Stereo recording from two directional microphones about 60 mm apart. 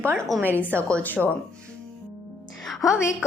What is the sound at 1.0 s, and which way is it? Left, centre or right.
Speech, left.